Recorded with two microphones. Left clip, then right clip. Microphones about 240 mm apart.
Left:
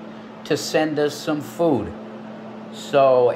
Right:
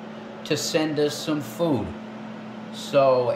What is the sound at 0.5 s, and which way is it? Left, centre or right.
Speech, centre.